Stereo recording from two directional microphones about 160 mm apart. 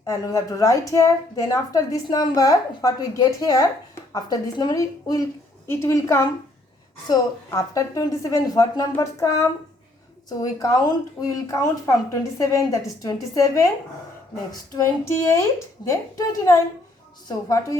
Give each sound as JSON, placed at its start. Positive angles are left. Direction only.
{"t": 0.0, "sound": "a woman's voice", "side_deg": 20}
{"t": 15.0, "sound": "a woman's voice", "side_deg": 20}